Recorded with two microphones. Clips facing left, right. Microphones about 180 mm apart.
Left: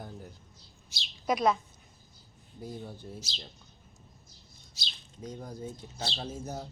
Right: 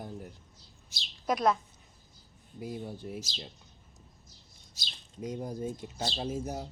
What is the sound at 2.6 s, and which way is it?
Speech, 10° right (ahead or behind).